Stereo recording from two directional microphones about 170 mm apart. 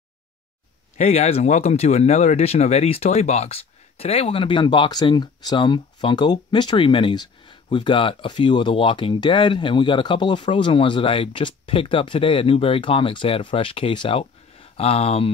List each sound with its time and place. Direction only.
0.9 s speech: 40° left (ahead or behind)